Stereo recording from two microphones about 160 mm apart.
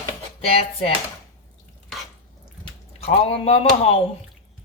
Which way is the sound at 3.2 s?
40° left (ahead or behind).